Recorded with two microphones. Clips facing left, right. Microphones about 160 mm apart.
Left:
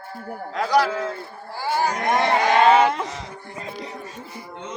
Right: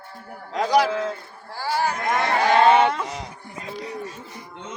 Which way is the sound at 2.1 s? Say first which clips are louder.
Left 4 dB; 20° left (ahead or behind).